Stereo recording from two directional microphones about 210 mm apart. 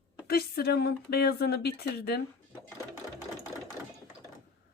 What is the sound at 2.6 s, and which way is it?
Sewing machine, 15° left (ahead or behind).